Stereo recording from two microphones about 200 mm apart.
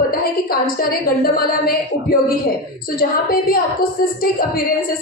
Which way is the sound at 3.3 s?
45° left (ahead or behind).